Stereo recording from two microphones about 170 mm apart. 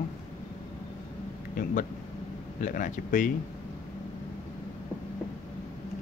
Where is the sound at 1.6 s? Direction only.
50° left (ahead or behind).